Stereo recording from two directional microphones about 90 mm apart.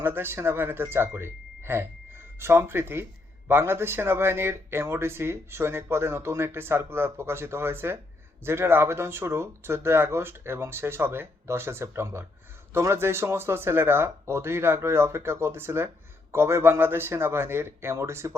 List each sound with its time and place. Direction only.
0.0 s speech: 25° right (ahead or behind)